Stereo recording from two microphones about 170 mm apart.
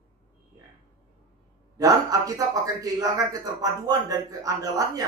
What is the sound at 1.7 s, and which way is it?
A man's voice, 20° right (ahead or behind).